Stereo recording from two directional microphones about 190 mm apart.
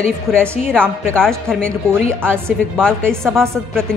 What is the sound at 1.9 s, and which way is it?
Speech, 15° right (ahead or behind).